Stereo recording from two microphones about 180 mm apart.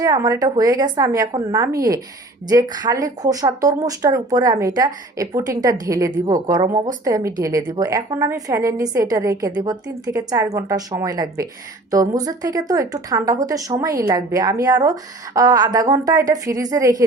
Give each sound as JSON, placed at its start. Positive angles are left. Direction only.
{"t": 0.0, "sound": "a woman's voice", "side_deg": -20}